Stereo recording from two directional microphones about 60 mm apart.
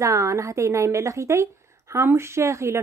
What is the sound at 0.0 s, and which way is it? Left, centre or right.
A woman's voice, right.